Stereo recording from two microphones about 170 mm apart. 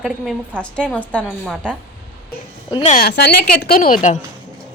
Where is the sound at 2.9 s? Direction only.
70° left (ahead or behind); by 4.1 s 45° left (ahead or behind).